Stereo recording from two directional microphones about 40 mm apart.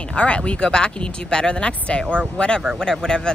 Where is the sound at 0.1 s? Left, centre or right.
Left.